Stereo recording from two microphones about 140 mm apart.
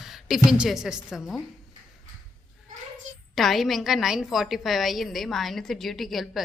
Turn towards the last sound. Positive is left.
turn(degrees=0)  # may be behind; listen again after turning